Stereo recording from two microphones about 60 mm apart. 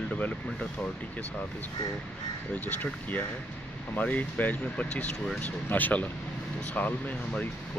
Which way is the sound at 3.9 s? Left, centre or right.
Left.